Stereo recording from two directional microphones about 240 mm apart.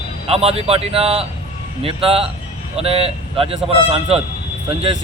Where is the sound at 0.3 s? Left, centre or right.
Right.